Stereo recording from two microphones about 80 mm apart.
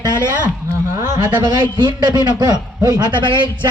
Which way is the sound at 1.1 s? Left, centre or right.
Right.